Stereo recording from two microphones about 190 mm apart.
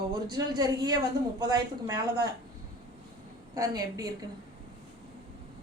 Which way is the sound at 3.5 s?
20° right (ahead or behind).